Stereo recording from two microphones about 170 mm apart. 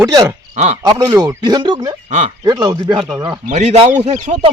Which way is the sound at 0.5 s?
40° right (ahead or behind).